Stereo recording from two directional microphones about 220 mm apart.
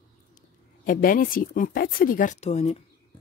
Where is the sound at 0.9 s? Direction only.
40° left (ahead or behind).